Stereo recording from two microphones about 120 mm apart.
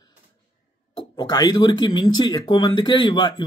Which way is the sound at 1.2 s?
35° left (ahead or behind).